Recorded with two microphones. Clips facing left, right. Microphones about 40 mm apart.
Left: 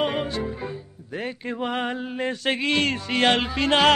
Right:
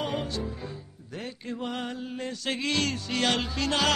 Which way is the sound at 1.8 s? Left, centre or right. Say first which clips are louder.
Left 7 dB; left.